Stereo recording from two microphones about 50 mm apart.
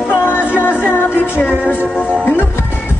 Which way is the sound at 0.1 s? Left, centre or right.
Left.